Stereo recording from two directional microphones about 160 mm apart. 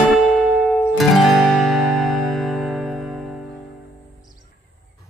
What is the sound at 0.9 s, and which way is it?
Music, centre (ahead or behind).